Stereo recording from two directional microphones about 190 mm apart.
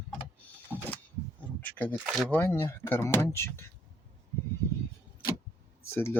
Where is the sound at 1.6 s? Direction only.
10° left (ahead or behind).